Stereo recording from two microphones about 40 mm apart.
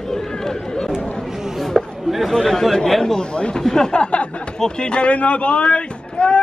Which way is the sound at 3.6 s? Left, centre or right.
Centre.